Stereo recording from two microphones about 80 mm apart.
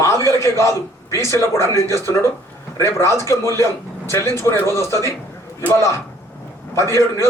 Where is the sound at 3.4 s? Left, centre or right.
Right.